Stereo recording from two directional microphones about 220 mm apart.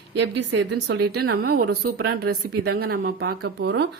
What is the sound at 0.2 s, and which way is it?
Speech, 55° right (ahead or behind).